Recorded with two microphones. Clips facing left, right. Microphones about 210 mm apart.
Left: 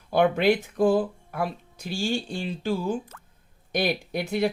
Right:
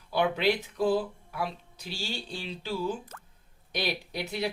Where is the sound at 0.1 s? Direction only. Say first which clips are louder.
Left 6 dB; 50° left (ahead or behind).